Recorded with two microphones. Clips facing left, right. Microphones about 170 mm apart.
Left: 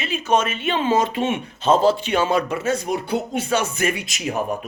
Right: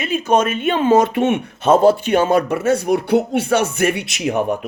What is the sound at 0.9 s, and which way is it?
Speech, 60° right (ahead or behind).